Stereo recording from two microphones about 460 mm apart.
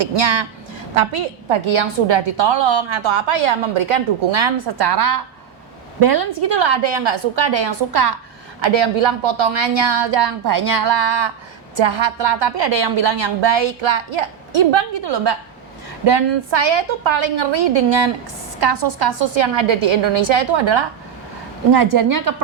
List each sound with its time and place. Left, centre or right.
0.0 s a woman's voice: right
1.5 s a woman's voice: right
4.5 s a woman's voice: right
6.5 s a woman's voice: right
8.6 s a woman's voice: right
11.8 s a woman's voice: right
14.7 s a woman's voice: right
18.6 s a woman's voice: right
21.7 s a woman's voice: right